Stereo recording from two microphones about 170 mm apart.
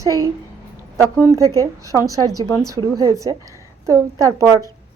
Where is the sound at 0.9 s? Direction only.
20° right (ahead or behind).